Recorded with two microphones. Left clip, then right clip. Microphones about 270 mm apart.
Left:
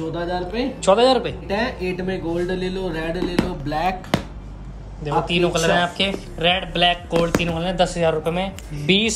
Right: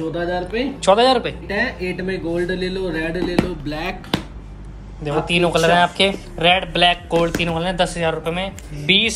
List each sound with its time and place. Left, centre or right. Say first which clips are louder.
0.1 s speech: right 3 dB; centre
3.6 s speech: left 4 dB; left
5.0 s speech: right 2 dB; centre